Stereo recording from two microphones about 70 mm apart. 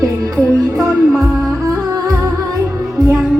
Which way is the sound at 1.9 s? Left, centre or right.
Right.